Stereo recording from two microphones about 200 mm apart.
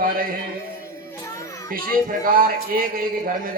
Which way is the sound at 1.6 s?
45° right (ahead or behind).